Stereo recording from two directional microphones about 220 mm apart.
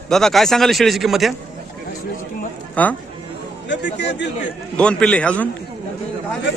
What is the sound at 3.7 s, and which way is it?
Speech, 55° left (ahead or behind).